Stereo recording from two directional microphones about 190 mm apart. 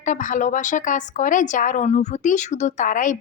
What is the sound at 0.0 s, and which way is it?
A woman's voice, 40° left (ahead or behind).